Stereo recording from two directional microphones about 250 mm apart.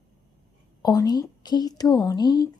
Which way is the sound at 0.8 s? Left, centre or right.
Centre.